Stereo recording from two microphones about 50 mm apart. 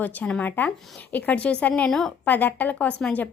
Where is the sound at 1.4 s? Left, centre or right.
Left.